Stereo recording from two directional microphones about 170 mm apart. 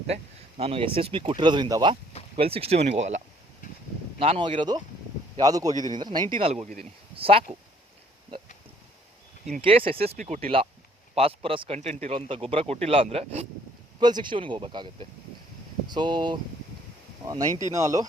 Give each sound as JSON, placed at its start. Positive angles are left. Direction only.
{"t": 0.1, "sound": "a man's voice", "side_deg": -35}
{"t": 4.2, "sound": "speech", "side_deg": -30}
{"t": 6.3, "sound": "a man's voice", "side_deg": -35}
{"t": 9.6, "sound": "a man's voice", "side_deg": -30}
{"t": 14.0, "sound": "speech", "side_deg": -25}
{"t": 15.9, "sound": "speech", "side_deg": -25}